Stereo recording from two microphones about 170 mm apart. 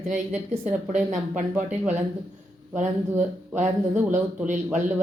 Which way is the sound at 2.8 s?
45° right (ahead or behind).